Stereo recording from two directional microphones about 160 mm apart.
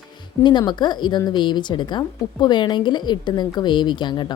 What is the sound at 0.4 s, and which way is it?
Speech, 30° left (ahead or behind).